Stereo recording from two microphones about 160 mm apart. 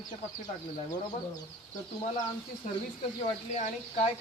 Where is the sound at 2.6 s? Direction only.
50° left (ahead or behind).